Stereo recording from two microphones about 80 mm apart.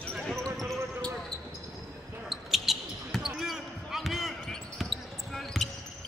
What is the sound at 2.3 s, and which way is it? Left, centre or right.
Basketball bounce, centre.